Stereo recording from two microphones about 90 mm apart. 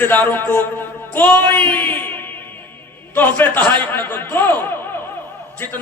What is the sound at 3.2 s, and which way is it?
A man's voice, 20° left (ahead or behind).